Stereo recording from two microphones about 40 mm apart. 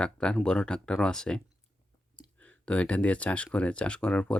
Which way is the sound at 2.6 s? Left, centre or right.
Left.